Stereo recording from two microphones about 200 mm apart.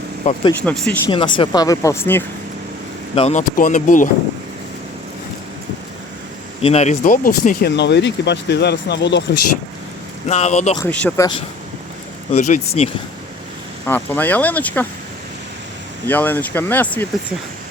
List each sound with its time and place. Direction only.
0.2 s speech: 35° left (ahead or behind)
0.6 s speech: 5° left (ahead or behind)
1.1 s speech: 25° left (ahead or behind)
3.2 s speech: 35° left (ahead or behind)
6.6 s speech: 30° left (ahead or behind); by 9.2 s 60° left (ahead or behind)
10.2 s speech: 35° left (ahead or behind)
10.8 s speech: 10° left (ahead or behind)
12.3 s speech: 35° left (ahead or behind)
13.8 s speech: 10° left (ahead or behind)
16.0 s speech: 10° left (ahead or behind)